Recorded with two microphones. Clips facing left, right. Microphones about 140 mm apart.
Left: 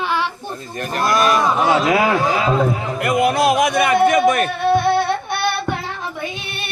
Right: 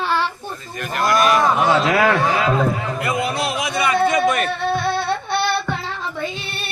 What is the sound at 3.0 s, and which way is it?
Speech, 55° left (ahead or behind).